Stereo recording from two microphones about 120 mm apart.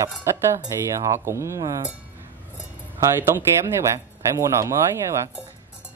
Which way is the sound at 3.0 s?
20° right (ahead or behind).